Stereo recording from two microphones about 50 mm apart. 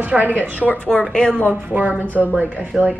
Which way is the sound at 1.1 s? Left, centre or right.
Centre.